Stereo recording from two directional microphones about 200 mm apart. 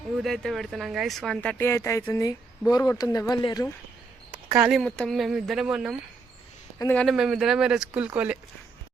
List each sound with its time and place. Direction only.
0.2 s speech: centre (ahead or behind); by 3.7 s 20° left (ahead or behind)
4.5 s speech: 5° right (ahead or behind)
6.7 s speech: 10° left (ahead or behind); by 8.4 s 5° right (ahead or behind)